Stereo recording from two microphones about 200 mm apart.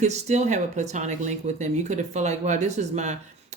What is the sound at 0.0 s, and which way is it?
Speech, 35° right (ahead or behind).